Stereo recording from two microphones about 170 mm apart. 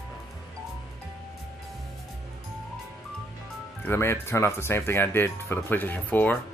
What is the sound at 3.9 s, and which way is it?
Speech, 15° left (ahead or behind).